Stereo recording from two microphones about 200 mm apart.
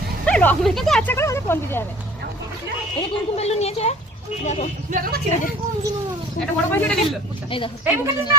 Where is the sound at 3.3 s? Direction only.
30° left (ahead or behind).